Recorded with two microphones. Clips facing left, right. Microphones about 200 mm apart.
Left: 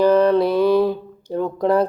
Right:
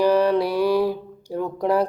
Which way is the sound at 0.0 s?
10° right (ahead or behind).